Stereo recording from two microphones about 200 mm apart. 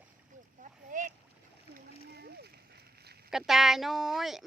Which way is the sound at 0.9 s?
40° right (ahead or behind).